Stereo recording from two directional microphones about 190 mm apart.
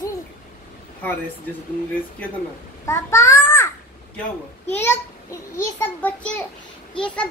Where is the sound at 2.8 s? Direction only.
15° left (ahead or behind).